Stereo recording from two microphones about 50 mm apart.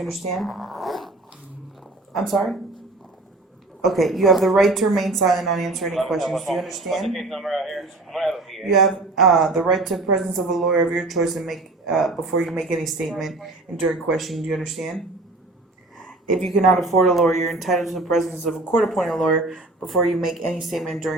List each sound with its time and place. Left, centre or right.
0.0 s a woman's voice: centre
2.1 s a woman's voice: centre
3.8 s a woman's voice: centre
10.7 s speech: centre
11.0 s a woman's voice: centre
16.5 s a woman's voice: centre